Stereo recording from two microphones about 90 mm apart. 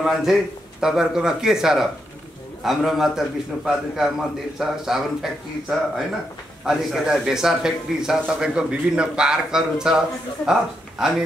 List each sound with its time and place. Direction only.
0.0 s a man's voice: 5° right (ahead or behind)